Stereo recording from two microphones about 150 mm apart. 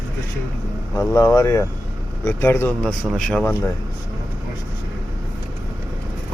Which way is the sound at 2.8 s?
Centre (ahead or behind).